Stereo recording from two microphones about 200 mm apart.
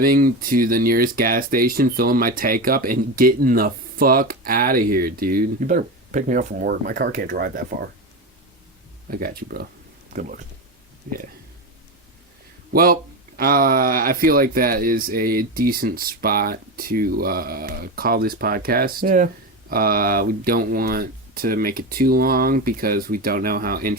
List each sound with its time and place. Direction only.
0.0 s speech: 45° right (ahead or behind)
9.0 s speech: 45° right (ahead or behind)
12.7 s speech: 45° right (ahead or behind)